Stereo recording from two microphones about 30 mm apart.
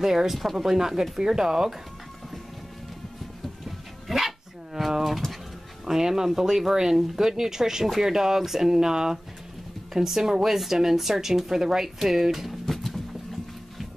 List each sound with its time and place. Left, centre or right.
0.0 s speech: centre
0.4 s speech: centre
0.7 s speech: centre
3.6 s dog: centre
5.9 s speech: centre
12.6 s a sound: centre